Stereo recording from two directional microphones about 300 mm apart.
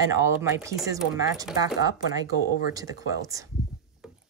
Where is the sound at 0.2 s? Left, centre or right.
Centre.